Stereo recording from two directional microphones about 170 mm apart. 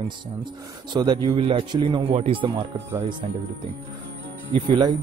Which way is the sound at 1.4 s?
30° right (ahead or behind).